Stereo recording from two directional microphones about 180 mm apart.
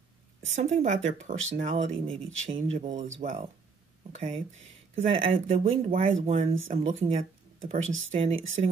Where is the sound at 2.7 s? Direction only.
45° right (ahead or behind).